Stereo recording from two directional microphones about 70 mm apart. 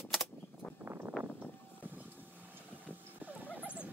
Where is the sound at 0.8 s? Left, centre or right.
Right.